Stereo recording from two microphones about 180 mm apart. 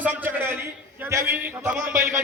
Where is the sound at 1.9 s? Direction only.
50° right (ahead or behind).